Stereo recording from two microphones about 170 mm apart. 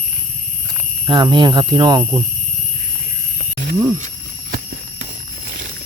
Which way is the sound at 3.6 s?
50° right (ahead or behind).